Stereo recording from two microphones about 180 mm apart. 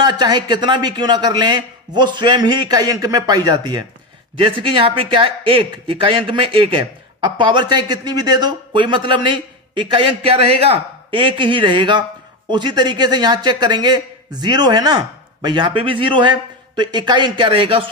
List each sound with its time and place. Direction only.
0.0 s speech: 25° right (ahead or behind)